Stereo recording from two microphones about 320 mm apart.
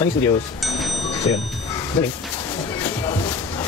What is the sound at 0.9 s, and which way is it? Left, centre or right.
Music, left.